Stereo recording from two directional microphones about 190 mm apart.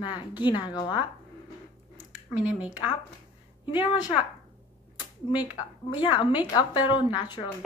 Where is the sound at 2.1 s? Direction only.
5° right (ahead or behind).